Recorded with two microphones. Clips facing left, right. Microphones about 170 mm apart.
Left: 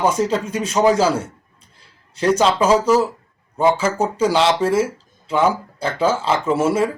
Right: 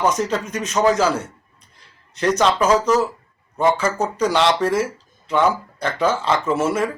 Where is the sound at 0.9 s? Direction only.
30° left (ahead or behind).